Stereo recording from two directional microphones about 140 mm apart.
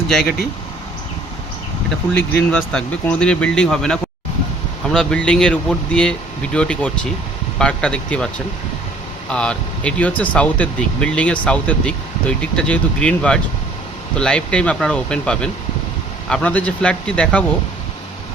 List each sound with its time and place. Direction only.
2.1 s speech: 10° left (ahead or behind)
9.3 s speech: 5° left (ahead or behind)